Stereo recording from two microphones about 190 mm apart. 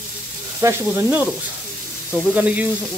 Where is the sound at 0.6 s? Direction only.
15° right (ahead or behind).